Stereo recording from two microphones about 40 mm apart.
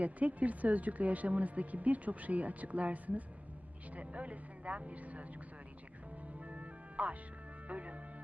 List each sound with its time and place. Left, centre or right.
0.0 s speech: right
6.4 s music: right
7.7 s speech: right